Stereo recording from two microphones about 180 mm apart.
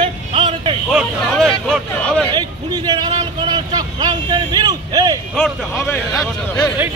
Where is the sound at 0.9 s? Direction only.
Centre (ahead or behind).